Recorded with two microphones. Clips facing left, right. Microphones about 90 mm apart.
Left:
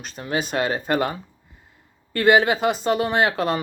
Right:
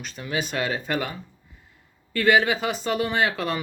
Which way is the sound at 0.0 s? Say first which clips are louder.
Left 3 dB; 40° left (ahead or behind).